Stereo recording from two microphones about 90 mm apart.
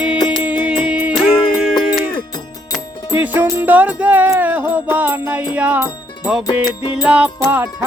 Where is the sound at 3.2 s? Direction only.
20° right (ahead or behind).